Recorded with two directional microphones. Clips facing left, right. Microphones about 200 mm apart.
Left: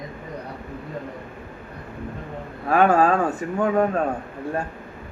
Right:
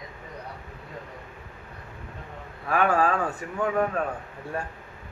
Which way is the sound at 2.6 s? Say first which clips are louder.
Left 6 dB; 40° left (ahead or behind).